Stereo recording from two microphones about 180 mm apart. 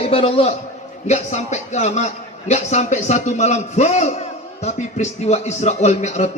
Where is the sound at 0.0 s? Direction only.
35° left (ahead or behind).